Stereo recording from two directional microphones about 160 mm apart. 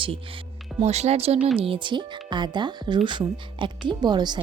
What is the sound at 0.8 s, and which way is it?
A woman's voice, 40° right (ahead or behind).